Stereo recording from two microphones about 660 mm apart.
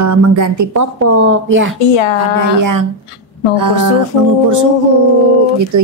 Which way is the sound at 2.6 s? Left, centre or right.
Right.